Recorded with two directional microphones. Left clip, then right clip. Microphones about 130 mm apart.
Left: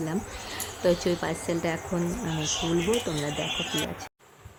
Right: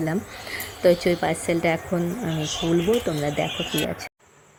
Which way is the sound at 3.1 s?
55° right (ahead or behind).